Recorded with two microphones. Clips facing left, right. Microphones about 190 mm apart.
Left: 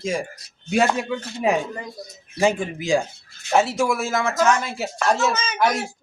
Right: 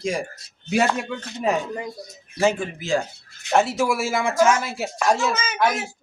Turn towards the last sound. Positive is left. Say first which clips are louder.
# left 1 dB
turn(degrees=-5)  # may be behind; listen again after turning